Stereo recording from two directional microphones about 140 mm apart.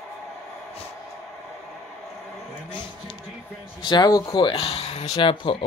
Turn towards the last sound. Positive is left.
turn(degrees=35)  # may be behind; listen again after turning